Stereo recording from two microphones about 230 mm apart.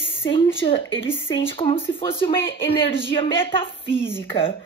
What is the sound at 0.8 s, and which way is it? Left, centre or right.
Speech, left.